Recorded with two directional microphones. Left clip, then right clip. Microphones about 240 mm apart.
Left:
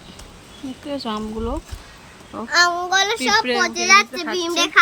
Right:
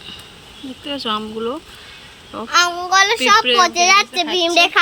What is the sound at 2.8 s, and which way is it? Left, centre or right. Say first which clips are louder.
Speech: right 5 dB; centre.